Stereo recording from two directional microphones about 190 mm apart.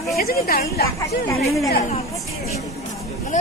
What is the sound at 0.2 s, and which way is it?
Speech, 55° left (ahead or behind).